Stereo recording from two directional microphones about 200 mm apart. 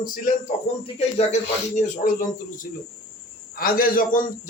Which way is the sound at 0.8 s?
35° left (ahead or behind).